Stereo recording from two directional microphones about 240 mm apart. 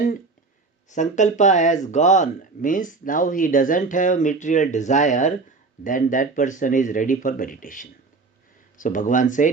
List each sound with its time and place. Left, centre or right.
0.9 s speech: left